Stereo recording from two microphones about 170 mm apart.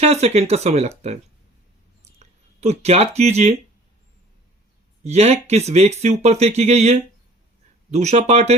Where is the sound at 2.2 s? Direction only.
40° right (ahead or behind).